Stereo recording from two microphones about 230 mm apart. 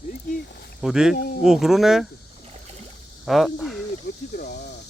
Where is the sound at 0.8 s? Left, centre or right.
Centre.